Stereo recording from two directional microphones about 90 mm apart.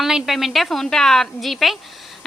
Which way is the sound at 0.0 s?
5° right (ahead or behind).